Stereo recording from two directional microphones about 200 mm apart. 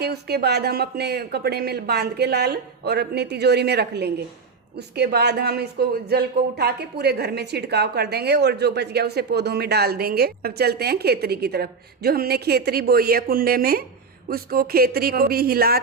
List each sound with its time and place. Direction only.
0.0 s speech: 55° right (ahead or behind)